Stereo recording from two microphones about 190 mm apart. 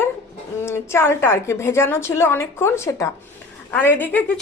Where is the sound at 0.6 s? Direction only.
15° left (ahead or behind).